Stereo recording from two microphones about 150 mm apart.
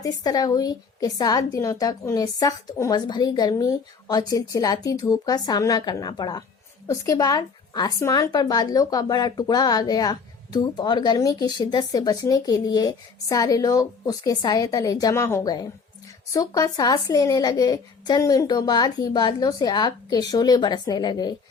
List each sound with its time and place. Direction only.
0.0 s speech: 25° left (ahead or behind)